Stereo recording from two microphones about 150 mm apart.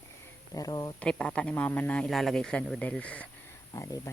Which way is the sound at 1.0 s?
5° left (ahead or behind).